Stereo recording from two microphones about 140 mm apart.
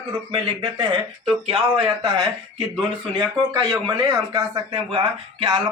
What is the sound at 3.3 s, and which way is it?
Speech, 30° right (ahead or behind).